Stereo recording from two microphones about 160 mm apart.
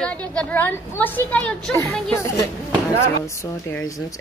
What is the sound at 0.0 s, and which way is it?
A woman's voice, 5° left (ahead or behind).